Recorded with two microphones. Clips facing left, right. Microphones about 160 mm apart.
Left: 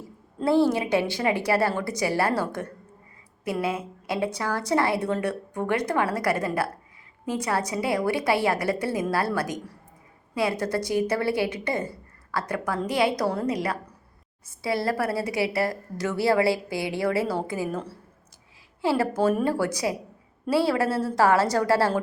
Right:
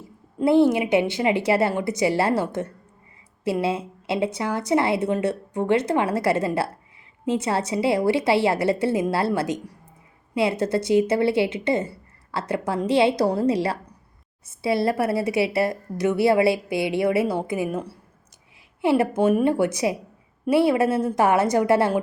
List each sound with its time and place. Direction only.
0.3 s a woman's voice: 20° right (ahead or behind)